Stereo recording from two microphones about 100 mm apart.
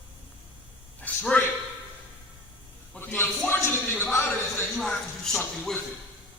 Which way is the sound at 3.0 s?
20° left (ahead or behind).